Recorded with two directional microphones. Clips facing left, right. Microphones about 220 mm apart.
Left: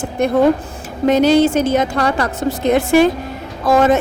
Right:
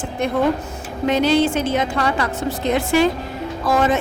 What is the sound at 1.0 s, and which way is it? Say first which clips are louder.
A woman's voice: left 5 dB; 45° left (ahead or behind).